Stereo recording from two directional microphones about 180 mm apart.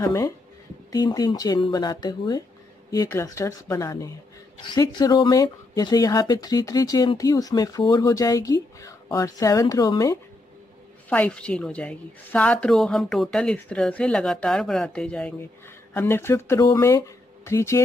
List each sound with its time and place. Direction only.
0.0 s speech: 20° left (ahead or behind)
11.1 s a woman's voice: 10° left (ahead or behind)